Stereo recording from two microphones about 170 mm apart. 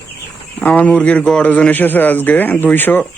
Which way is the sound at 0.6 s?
10° left (ahead or behind).